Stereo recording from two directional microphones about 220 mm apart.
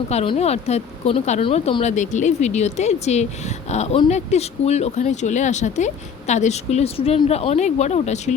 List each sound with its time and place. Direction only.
0.1 s speech: 30° left (ahead or behind)